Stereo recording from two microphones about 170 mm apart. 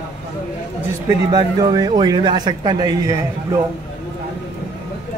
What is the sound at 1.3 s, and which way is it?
Speech, 20° right (ahead or behind).